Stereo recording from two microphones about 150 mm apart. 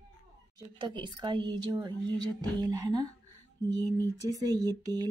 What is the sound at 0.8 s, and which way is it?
A woman's voice, 30° right (ahead or behind).